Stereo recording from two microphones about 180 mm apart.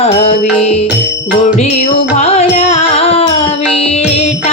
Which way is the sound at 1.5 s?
40° left (ahead or behind).